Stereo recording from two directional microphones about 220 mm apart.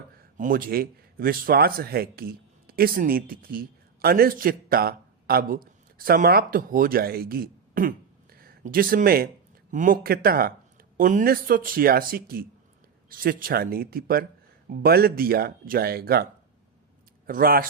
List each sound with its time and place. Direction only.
0.2 s a man's voice: 40° right (ahead or behind)
17.2 s speech: 40° right (ahead or behind)